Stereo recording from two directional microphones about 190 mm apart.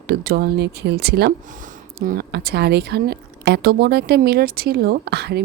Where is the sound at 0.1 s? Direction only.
55° right (ahead or behind).